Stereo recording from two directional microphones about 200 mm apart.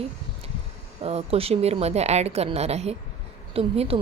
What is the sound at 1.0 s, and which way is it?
A woman's voice, 30° right (ahead or behind).